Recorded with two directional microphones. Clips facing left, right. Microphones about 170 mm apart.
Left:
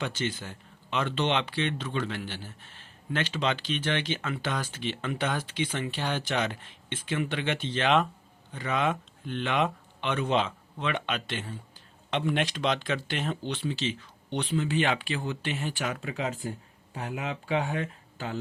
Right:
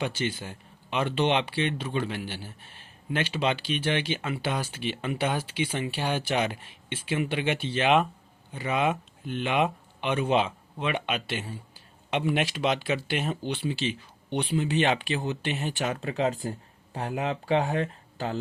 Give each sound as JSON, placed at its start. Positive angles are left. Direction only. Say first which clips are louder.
{"t": 0.0, "sound": "speech", "louder": "right 2 dB", "side_deg": -10}